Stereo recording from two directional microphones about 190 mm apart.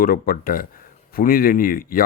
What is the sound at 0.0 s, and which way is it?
Speech, 50° left (ahead or behind).